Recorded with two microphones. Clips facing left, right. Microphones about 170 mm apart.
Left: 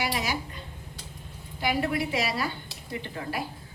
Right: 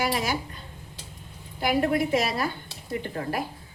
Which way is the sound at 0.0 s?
45° right (ahead or behind).